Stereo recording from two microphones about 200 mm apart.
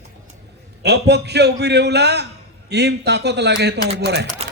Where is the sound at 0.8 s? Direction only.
55° right (ahead or behind).